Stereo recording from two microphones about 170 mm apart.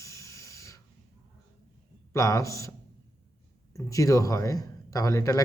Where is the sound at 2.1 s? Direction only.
20° left (ahead or behind).